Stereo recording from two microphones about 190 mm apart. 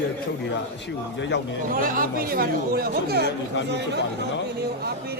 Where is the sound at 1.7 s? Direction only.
50° right (ahead or behind).